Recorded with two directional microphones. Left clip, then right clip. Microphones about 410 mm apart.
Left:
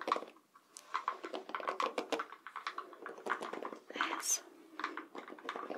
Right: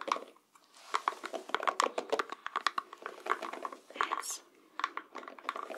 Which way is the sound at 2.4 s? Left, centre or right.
Right.